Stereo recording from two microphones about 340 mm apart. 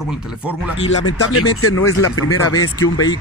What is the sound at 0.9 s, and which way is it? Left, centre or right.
Speech, left.